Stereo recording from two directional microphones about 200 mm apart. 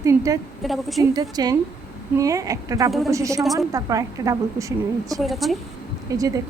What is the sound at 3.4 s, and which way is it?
Speech, centre (ahead or behind).